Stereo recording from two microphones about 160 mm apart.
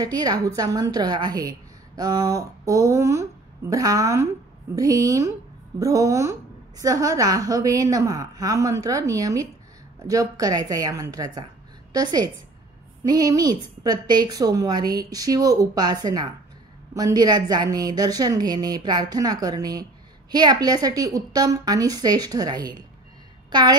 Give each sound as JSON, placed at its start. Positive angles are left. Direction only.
{"t": 0.0, "sound": "a woman's voice", "side_deg": -25}